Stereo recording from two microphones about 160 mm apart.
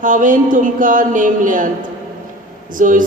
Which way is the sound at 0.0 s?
55° right (ahead or behind).